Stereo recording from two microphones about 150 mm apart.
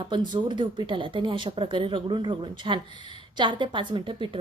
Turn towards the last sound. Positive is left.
turn(degrees=-30)  # may be behind; listen again after turning